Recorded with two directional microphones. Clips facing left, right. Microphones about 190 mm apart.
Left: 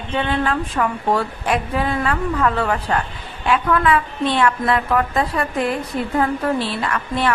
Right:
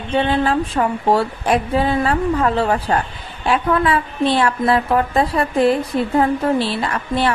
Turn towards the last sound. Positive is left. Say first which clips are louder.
# right 2 dB
turn(degrees=-30)  # may be behind; listen again after turning